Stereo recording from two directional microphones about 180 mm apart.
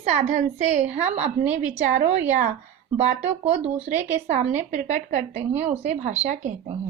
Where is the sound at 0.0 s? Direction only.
35° right (ahead or behind).